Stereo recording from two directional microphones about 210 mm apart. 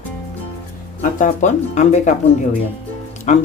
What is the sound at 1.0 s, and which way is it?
Speech, 40° left (ahead or behind).